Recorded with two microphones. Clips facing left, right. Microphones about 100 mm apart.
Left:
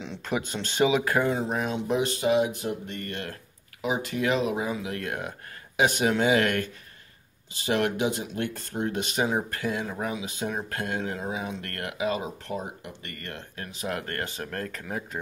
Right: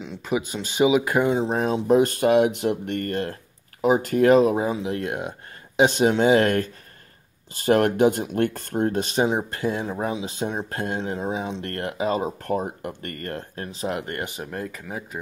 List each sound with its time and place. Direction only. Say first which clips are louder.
0.0 s speech: right 4 dB; 5° right (ahead or behind); by 1.5 s 20° right (ahead or behind)
1.5 s speech: right 7 dB; 35° right (ahead or behind); by 3.0 s 75° right (ahead or behind)
3.0 s speech: right 8 dB; 40° right (ahead or behind)
7.5 s speech: right 7 dB; 45° right (ahead or behind)
13.9 s speech: right 3 dB; 20° right (ahead or behind); by 15.0 s centre (ahead or behind)